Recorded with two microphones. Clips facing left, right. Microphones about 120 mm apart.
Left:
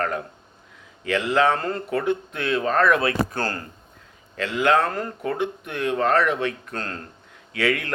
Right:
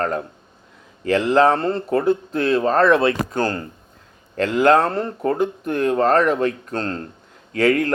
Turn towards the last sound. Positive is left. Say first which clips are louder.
# right 7 dB
turn(degrees=-40)  # may be behind; listen again after turning